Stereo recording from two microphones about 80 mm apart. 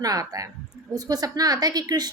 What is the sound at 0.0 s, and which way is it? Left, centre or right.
A woman's voice, right.